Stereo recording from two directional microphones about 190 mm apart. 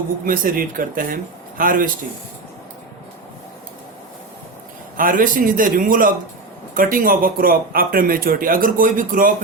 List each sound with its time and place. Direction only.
0.3 s speech: 45° right (ahead or behind)
4.9 s speech: 45° right (ahead or behind)